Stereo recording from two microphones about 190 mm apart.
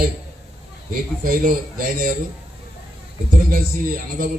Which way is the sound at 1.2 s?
45° right (ahead or behind).